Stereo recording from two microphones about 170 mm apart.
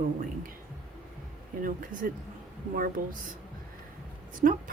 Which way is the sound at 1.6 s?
55° right (ahead or behind).